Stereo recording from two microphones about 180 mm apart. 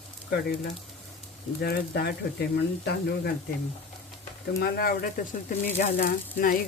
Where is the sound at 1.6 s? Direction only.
65° left (ahead or behind).